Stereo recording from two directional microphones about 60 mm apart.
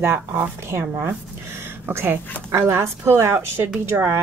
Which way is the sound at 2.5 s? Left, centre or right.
Right.